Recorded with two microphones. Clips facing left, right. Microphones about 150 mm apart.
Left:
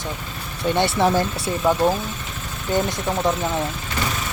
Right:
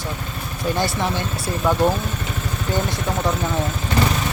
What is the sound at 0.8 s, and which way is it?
Speech, 30° left (ahead or behind).